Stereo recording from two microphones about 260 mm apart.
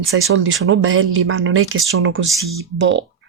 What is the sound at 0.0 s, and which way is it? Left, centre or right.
Speech, right.